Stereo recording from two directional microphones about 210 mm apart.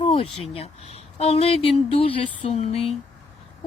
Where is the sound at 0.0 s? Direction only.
30° left (ahead or behind).